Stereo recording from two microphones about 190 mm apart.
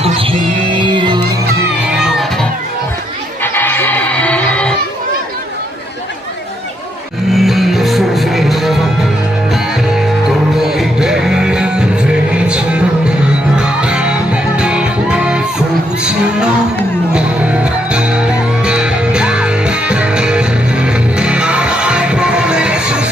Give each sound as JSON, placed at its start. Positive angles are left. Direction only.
{"t": 0.0, "sound": "music", "side_deg": -30}
{"t": 1.8, "sound": "music", "side_deg": -5}
{"t": 3.4, "sound": "music", "side_deg": 10}
{"t": 7.3, "sound": "music", "side_deg": 0}
{"t": 17.2, "sound": "music", "side_deg": -5}